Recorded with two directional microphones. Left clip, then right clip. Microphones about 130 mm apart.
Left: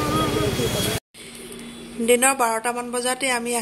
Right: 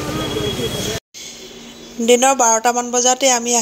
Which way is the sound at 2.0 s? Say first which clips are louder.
Right 6 dB; 25° right (ahead or behind).